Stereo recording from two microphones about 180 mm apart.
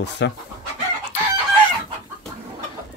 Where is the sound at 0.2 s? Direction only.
80° left.